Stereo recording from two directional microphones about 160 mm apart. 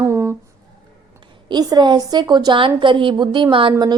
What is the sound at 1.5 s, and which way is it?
A woman's voice, 25° right (ahead or behind).